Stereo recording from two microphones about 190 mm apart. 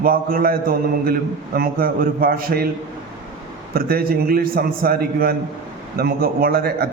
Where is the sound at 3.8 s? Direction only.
50° right (ahead or behind).